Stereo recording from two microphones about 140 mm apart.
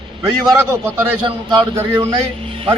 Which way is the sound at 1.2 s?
35° right (ahead or behind).